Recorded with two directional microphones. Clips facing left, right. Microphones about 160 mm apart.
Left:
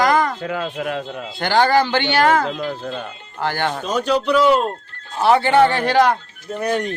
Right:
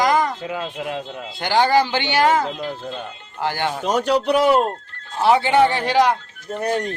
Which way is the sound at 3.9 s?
70° right (ahead or behind).